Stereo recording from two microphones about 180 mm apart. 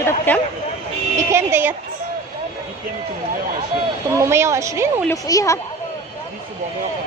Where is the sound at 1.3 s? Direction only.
10° right (ahead or behind).